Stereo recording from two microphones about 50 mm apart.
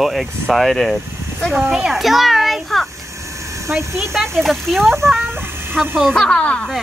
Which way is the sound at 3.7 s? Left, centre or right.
Right.